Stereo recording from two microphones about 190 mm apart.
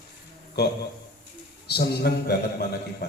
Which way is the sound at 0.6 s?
60° left (ahead or behind).